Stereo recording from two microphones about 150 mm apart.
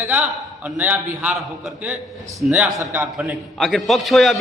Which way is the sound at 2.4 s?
5° right (ahead or behind).